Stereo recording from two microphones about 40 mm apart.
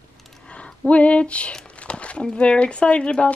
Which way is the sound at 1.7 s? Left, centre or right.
Left.